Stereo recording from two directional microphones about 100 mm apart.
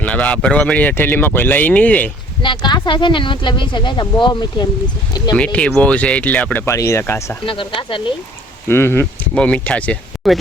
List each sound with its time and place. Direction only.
0.0 s speech: 15° left (ahead or behind)
2.4 s speech: 50° left (ahead or behind)
5.4 s speech: 10° left (ahead or behind)
6.7 s speech: 30° left (ahead or behind)
7.4 s speech: 60° left (ahead or behind)
8.6 s speech: 25° left (ahead or behind)
9.3 s speech: 10° left (ahead or behind)